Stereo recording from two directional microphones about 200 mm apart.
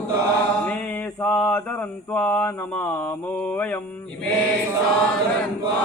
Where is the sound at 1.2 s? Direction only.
10° left (ahead or behind).